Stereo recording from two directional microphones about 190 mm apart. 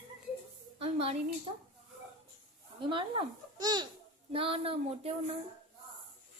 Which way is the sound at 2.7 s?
25° right (ahead or behind).